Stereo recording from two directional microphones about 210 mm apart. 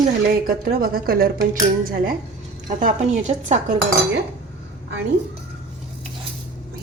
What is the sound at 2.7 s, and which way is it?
Speech, 35° right (ahead or behind).